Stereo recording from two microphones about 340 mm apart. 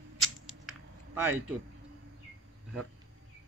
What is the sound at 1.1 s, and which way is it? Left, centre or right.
Speech, centre.